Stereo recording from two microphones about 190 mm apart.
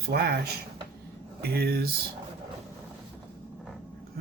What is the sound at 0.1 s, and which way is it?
Speech, 55° right (ahead or behind).